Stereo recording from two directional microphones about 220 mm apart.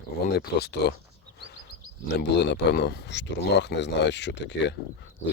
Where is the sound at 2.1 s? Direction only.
50° left (ahead or behind).